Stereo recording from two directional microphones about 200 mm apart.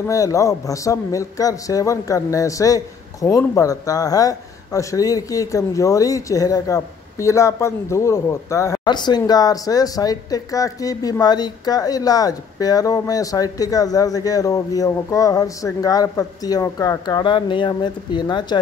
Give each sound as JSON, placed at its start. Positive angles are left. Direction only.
{"t": 0.1, "sound": "speech", "side_deg": 15}